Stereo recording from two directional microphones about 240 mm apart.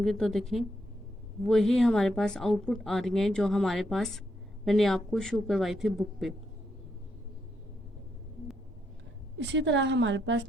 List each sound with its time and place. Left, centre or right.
0.0 s a woman's voice: centre
9.4 s a woman's voice: right